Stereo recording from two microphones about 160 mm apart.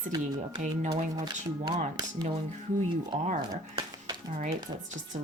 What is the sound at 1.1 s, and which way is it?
Speech, 25° right (ahead or behind).